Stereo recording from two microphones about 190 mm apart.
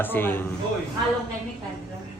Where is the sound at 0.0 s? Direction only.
10° left (ahead or behind).